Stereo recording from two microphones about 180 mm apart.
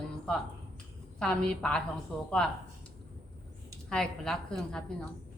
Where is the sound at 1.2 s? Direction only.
5° left (ahead or behind).